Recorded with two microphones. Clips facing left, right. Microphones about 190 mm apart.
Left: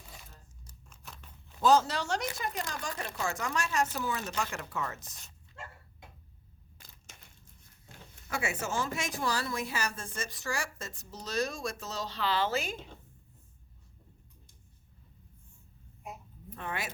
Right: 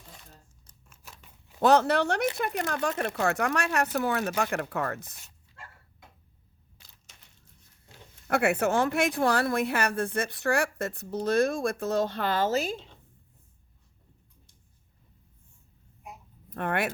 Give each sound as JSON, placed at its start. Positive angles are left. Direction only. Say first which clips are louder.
{"t": 0.9, "sound": "scissors", "louder": "left 1 dB", "side_deg": -5}
{"t": 1.6, "sound": "speech", "louder": "right 4 dB", "side_deg": -65}
{"t": 6.7, "sound": "crushing", "louder": "left 4 dB", "side_deg": 50}
{"t": 8.3, "sound": "speech", "louder": "right 10 dB", "side_deg": -60}
{"t": 16.6, "sound": "speech", "louder": "right 10 dB", "side_deg": -60}